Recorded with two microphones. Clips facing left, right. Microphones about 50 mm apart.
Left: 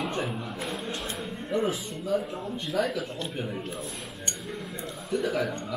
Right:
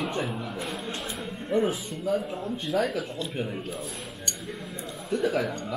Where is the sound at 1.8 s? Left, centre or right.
Centre.